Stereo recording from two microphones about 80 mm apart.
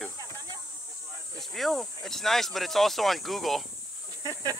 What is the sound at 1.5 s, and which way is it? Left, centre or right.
Speech, centre.